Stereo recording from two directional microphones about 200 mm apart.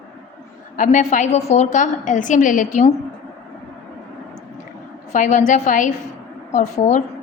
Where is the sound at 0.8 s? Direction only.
40° left (ahead or behind).